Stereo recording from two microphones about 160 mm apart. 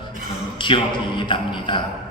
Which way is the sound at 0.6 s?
30° left (ahead or behind).